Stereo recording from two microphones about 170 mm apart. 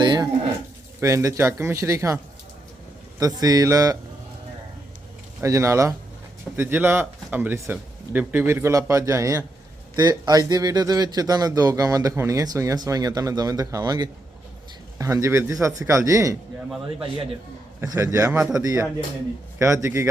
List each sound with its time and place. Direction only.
0.0 s livestock: 25° right (ahead or behind)
1.0 s speech: 20° right (ahead or behind)
3.2 s a man's voice: 20° right (ahead or behind)
5.4 s a man's voice: 15° right (ahead or behind)
17.7 s a man's voice: 20° right (ahead or behind)